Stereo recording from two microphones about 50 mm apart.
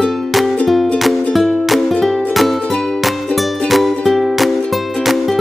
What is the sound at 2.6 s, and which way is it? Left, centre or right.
Music, centre.